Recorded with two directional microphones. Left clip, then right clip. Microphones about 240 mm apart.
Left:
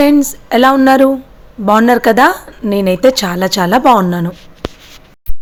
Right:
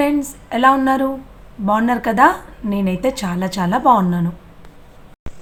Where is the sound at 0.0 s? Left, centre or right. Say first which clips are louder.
Left 8 dB; left.